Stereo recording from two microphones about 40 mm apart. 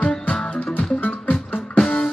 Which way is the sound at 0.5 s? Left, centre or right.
Left.